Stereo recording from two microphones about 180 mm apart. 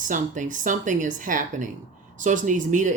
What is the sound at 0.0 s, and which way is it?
Speech, 45° right (ahead or behind).